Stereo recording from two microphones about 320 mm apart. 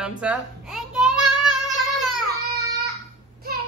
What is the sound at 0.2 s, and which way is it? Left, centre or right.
Child singing, centre.